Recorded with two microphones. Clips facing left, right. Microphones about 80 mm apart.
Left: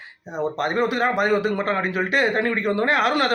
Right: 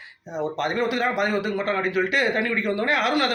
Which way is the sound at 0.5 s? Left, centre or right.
Left.